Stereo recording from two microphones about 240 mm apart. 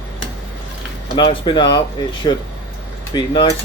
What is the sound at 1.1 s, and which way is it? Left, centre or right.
Speech, centre.